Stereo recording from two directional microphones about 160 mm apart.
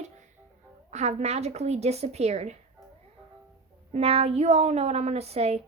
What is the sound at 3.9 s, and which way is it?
A woman's voice, 40° right (ahead or behind).